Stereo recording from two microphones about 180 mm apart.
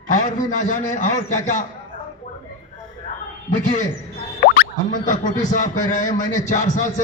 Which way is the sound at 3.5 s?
45° left (ahead or behind).